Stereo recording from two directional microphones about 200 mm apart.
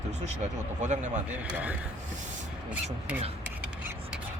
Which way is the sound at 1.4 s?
5° right (ahead or behind).